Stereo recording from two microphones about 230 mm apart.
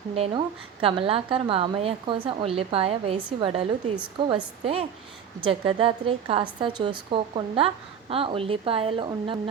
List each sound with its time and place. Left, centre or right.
0.1 s a woman's voice: right